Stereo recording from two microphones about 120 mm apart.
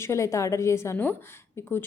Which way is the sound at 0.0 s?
25° left (ahead or behind).